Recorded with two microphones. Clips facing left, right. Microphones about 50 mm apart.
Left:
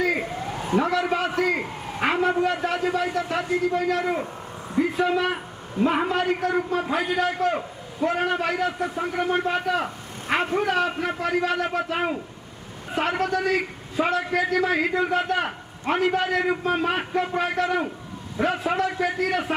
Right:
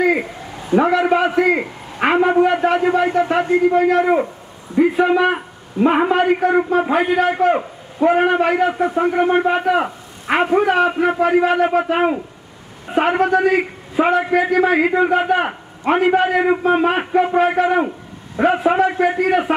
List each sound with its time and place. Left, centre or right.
0.7 s a man's voice: right